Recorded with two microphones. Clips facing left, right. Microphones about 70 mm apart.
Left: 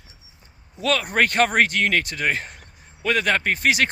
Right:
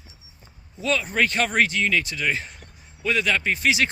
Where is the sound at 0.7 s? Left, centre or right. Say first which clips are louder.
Left 2 dB; left.